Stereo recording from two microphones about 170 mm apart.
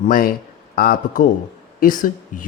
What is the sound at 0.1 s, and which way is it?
Speech, 55° left (ahead or behind).